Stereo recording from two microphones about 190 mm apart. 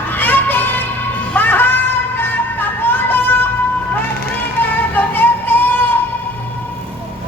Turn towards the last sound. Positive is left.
turn(degrees=10)  # may be behind; listen again after turning